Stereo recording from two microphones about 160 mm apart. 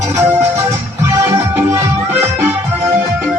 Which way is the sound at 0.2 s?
15° right (ahead or behind).